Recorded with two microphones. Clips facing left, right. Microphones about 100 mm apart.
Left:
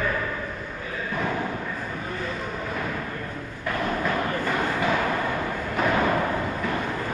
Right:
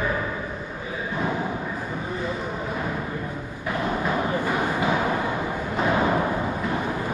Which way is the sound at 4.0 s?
15° right (ahead or behind).